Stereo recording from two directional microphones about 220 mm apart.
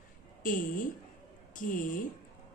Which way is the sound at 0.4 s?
40° left (ahead or behind).